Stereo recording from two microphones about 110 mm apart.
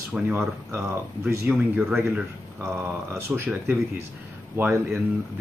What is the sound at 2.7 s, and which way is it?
Speech, 20° right (ahead or behind).